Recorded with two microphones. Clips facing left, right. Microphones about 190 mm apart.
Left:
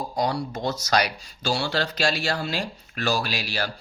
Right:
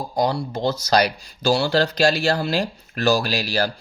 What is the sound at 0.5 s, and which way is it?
Speech, 30° right (ahead or behind).